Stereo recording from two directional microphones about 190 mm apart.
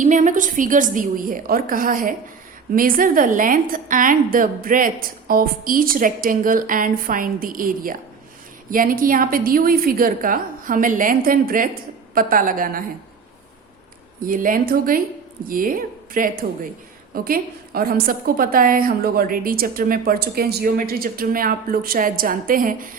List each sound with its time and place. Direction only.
0.0 s a woman's voice: 40° right (ahead or behind)
14.2 s a woman's voice: 45° right (ahead or behind)